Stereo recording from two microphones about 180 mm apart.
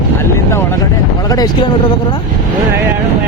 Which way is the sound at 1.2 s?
20° left (ahead or behind).